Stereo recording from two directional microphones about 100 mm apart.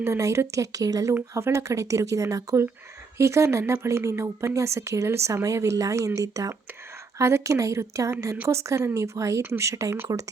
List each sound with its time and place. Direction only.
0.0 s a woman's voice: 30° right (ahead or behind)